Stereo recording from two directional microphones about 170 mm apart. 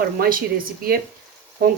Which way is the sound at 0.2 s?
55° right (ahead or behind).